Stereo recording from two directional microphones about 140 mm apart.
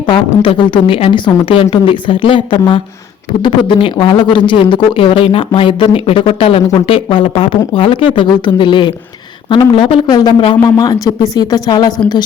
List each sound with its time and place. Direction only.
0.1 s speech: 35° left (ahead or behind)